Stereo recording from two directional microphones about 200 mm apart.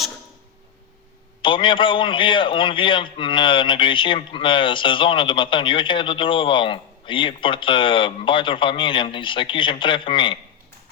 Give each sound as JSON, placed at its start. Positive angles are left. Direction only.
{"t": 1.4, "sound": "a man's voice", "side_deg": 25}